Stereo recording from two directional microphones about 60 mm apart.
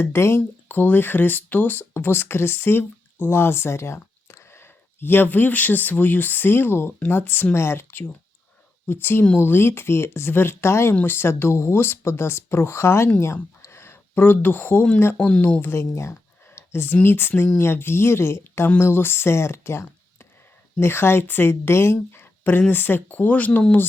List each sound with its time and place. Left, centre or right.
0.0 s speech: left
0.7 s a woman's voice: left
15.6 s a woman's voice: left